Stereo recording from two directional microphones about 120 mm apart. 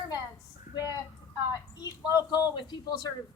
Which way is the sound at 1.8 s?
30° left (ahead or behind).